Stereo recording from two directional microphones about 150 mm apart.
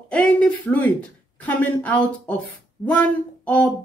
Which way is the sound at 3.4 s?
10° left (ahead or behind).